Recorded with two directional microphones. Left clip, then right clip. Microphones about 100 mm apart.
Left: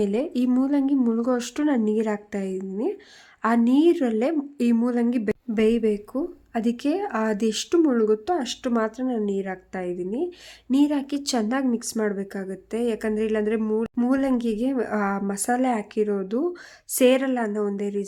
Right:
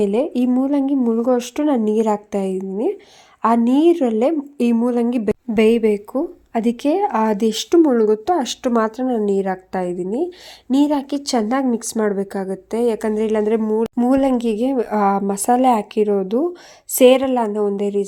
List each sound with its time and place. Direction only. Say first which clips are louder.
0.0 s a woman's voice: right 6 dB; 25° right (ahead or behind)
5.5 s a woman's voice: right 7 dB; 45° right (ahead or behind)